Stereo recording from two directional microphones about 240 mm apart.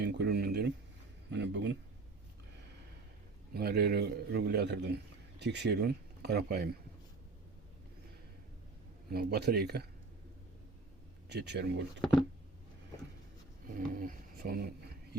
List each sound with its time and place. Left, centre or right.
0.0 s a sound: right
1.3 s a man's voice: right
3.5 s a man's voice: right
9.1 s speech: right
11.3 s a man's voice: right
13.7 s speech: right